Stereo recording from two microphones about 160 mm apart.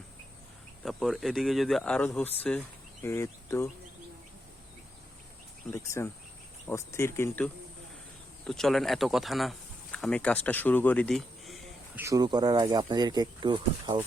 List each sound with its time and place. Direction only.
0.8 s speech: centre (ahead or behind)
5.7 s speech: 15° left (ahead or behind); by 11.6 s centre (ahead or behind)
11.9 s speech: 20° right (ahead or behind)